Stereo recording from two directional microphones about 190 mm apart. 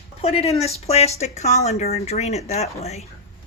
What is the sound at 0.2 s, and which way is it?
Speech, 35° left (ahead or behind).